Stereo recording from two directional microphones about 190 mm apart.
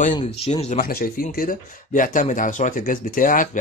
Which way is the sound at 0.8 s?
50° left (ahead or behind).